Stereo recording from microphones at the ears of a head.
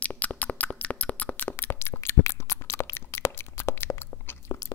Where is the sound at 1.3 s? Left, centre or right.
Left.